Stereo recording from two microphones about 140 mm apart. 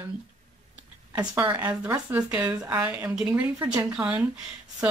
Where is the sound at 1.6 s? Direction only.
10° right (ahead or behind).